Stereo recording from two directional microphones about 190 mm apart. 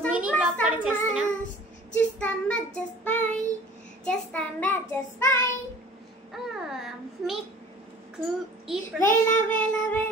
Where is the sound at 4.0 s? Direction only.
5° left (ahead or behind).